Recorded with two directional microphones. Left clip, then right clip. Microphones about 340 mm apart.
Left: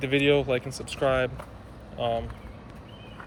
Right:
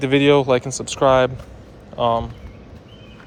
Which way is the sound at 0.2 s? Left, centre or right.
Centre.